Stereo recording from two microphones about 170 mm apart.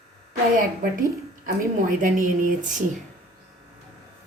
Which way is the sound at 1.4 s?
55° right (ahead or behind).